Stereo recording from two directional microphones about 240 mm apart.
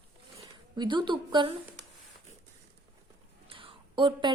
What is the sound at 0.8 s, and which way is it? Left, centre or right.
Speech, centre.